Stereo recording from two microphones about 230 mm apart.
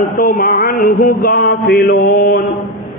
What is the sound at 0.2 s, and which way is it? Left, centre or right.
A man's voice, left.